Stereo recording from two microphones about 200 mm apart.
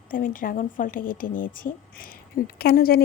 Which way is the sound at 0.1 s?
45° left (ahead or behind).